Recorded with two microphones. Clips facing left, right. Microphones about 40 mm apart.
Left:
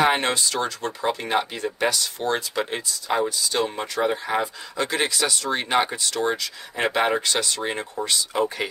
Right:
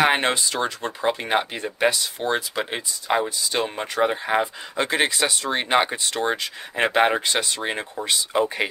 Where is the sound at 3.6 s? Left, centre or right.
Right.